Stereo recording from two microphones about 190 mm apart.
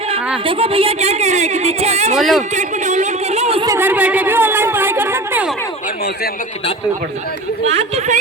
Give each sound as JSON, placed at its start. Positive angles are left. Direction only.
{"t": 0.4, "sound": "a woman's voice", "side_deg": -30}
{"t": 2.1, "sound": "speech", "side_deg": 0}
{"t": 2.6, "sound": "speech", "side_deg": -40}
{"t": 3.7, "sound": "speech", "side_deg": -10}
{"t": 7.7, "sound": "a woman's voice", "side_deg": -35}